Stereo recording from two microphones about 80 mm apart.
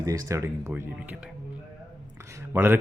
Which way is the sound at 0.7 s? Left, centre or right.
Right.